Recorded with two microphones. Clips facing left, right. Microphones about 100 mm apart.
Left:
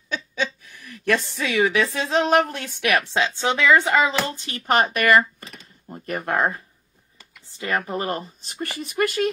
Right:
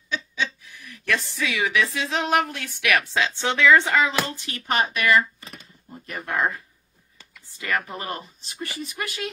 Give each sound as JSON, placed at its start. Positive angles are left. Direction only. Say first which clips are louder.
{"t": 0.1, "sound": "speech", "louder": "left 2 dB", "side_deg": 50}
{"t": 3.1, "sound": "speech", "louder": "left 2 dB", "side_deg": 20}
{"t": 4.6, "sound": "speech", "louder": "left 4 dB", "side_deg": 50}
{"t": 7.5, "sound": "speech", "louder": "left 3 dB", "side_deg": 30}